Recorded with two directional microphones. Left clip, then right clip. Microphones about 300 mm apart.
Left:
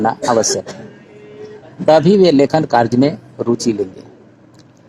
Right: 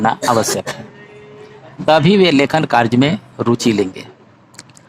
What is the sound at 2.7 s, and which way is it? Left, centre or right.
Speech, right.